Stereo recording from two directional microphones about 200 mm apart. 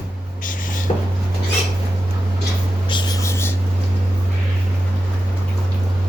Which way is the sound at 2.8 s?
20° left (ahead or behind).